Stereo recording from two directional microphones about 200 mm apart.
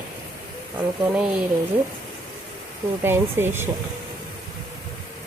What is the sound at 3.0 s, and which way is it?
Speech, 10° right (ahead or behind).